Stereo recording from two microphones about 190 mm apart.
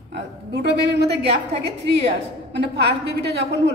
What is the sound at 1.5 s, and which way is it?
Speech, 35° right (ahead or behind).